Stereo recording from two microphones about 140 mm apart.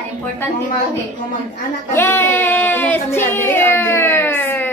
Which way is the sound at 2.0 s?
15° left (ahead or behind).